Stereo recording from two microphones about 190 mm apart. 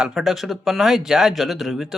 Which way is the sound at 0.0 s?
Centre (ahead or behind).